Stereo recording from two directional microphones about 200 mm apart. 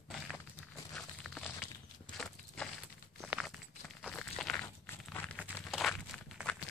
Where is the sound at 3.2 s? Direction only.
Centre (ahead or behind).